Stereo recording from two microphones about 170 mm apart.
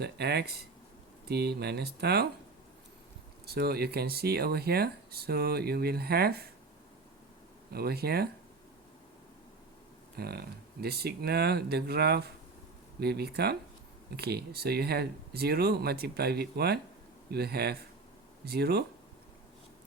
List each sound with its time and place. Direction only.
0.0 s speech: 75° right (ahead or behind)
3.4 s speech: 70° right (ahead or behind)
7.7 s speech: 65° right (ahead or behind)
10.2 s speech: 65° right (ahead or behind)